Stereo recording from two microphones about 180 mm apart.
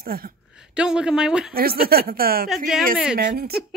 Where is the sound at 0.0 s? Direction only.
55° right (ahead or behind).